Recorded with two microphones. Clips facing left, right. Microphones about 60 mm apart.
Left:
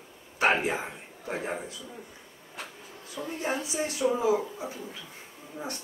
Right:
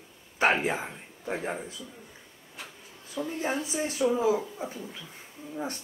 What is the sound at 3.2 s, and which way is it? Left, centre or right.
Speech, centre.